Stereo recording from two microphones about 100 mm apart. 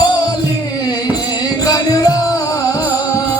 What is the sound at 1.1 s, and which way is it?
Music, 40° left (ahead or behind).